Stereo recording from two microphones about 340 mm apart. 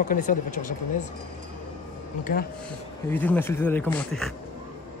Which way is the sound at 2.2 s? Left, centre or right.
Left.